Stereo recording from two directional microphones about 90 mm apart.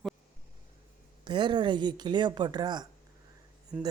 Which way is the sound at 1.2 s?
60° right (ahead or behind).